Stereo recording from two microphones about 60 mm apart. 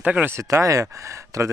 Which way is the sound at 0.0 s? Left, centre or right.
Right.